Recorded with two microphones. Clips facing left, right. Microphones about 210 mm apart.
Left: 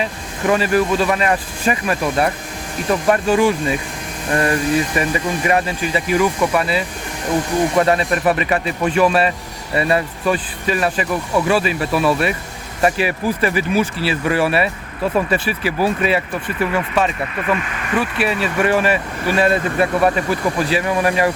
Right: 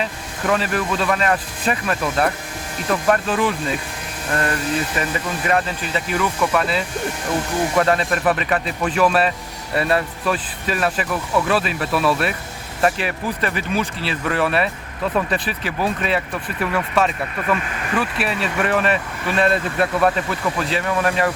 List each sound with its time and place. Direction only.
0.0 s speech: 5° left (ahead or behind)